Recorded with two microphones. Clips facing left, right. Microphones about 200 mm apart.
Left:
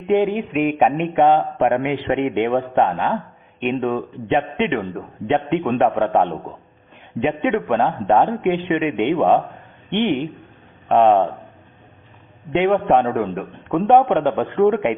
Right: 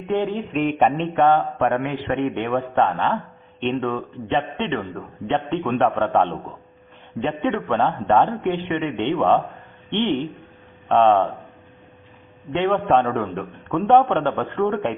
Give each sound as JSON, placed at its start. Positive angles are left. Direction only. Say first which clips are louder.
{"t": 0.1, "sound": "a man's voice", "louder": "left 5 dB", "side_deg": 15}
{"t": 0.6, "sound": "speech", "louder": "left 2 dB", "side_deg": 5}
{"t": 1.0, "sound": "a man's voice", "louder": "left 2 dB", "side_deg": 15}
{"t": 12.5, "sound": "a man's voice", "louder": "left 3 dB", "side_deg": 15}